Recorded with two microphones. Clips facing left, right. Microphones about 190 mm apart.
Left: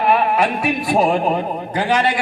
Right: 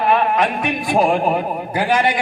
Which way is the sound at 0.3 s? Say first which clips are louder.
Left 1 dB; 5° left (ahead or behind).